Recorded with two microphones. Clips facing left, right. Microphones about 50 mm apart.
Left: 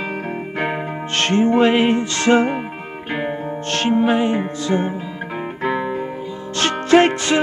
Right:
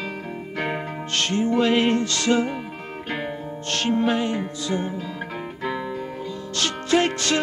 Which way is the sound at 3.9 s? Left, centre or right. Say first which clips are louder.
Left 5 dB; centre.